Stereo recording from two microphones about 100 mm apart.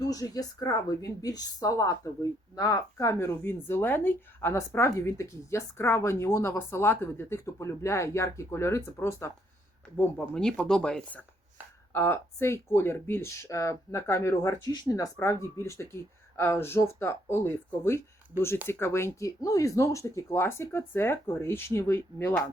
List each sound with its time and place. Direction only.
0.0 s speech: 35° left (ahead or behind)
9.8 s speech: 10° left (ahead or behind)
11.9 s speech: 25° left (ahead or behind)